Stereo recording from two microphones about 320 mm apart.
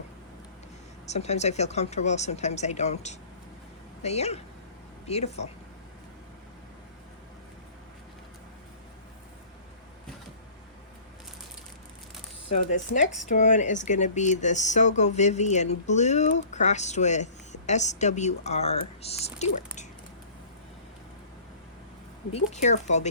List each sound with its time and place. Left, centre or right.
1.0 s speech: left
12.5 s speech: left
22.3 s speech: left